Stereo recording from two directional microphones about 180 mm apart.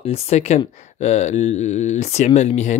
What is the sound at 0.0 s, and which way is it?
Speech, 35° left (ahead or behind).